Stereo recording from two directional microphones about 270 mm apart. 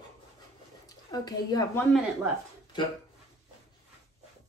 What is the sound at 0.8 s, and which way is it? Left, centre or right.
A woman's voice, centre.